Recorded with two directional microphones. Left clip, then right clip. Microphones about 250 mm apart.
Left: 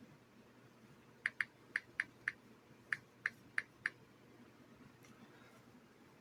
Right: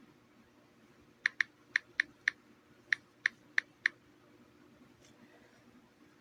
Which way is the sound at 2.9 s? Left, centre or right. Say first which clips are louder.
Right 8 dB; right.